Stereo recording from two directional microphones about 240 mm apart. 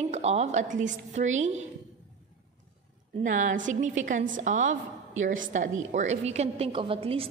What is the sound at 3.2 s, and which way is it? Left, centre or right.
A woman's voice, right.